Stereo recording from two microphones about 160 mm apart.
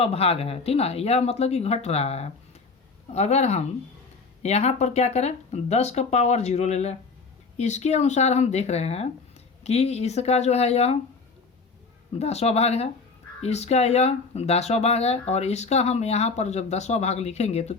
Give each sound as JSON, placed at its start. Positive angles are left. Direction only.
{"t": 0.0, "sound": "speech", "side_deg": 40}
{"t": 12.2, "sound": "speech", "side_deg": 40}